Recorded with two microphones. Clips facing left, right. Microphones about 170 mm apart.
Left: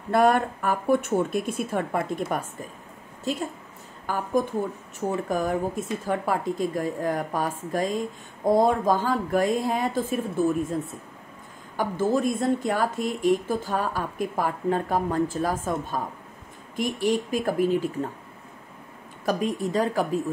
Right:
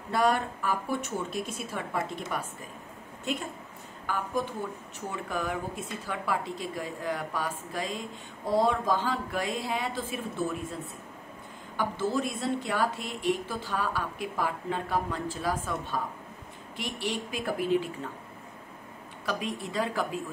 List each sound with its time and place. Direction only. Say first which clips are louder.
0.1 s speech: left 6 dB; 55° left (ahead or behind)
3.3 s a woman's voice: left 4 dB; 35° left (ahead or behind)
19.2 s speech: left 8 dB; 45° left (ahead or behind)